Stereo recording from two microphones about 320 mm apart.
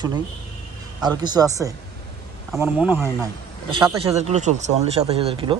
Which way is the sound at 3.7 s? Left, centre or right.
Centre.